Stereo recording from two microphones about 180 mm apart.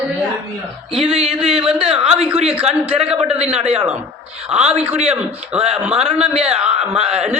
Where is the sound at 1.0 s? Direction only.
30° right (ahead or behind).